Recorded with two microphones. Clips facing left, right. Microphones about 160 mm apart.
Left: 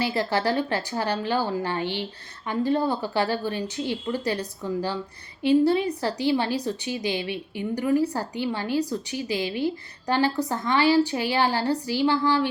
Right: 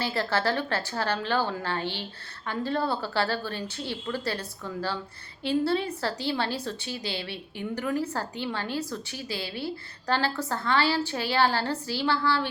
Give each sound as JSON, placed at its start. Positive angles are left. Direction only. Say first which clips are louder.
{"t": 0.0, "sound": "a woman's voice", "louder": "left 3 dB", "side_deg": 15}